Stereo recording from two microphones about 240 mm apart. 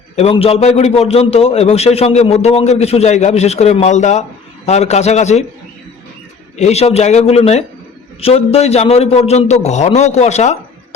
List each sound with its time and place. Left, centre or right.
0.2 s a man's voice: left
6.6 s a man's voice: left